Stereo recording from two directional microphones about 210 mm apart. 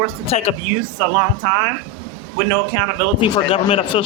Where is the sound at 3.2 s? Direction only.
25° left (ahead or behind).